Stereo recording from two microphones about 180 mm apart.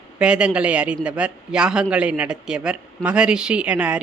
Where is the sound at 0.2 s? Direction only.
5° right (ahead or behind).